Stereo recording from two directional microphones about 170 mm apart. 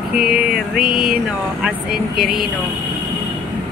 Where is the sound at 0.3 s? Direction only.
5° right (ahead or behind).